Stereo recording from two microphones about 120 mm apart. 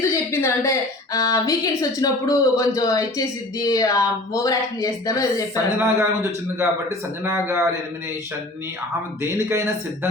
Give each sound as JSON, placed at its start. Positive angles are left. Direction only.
{"t": 0.0, "sound": "a sound", "side_deg": 20}
{"t": 1.1, "sound": "speech", "side_deg": 30}
{"t": 5.7, "sound": "speech", "side_deg": -20}
{"t": 7.3, "sound": "speech", "side_deg": -20}
{"t": 9.3, "sound": "speech", "side_deg": -20}